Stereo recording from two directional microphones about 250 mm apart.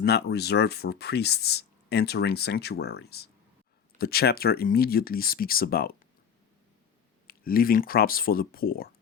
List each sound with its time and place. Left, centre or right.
0.0 s speech: left
7.3 s speech: left